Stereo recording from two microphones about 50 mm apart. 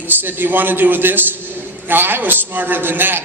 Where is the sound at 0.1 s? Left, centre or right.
Right.